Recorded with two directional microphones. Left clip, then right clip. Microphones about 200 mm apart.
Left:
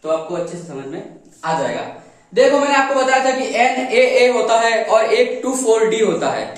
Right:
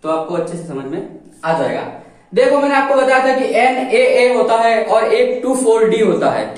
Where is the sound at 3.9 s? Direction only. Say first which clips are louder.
Right 1 dB; 25° left (ahead or behind).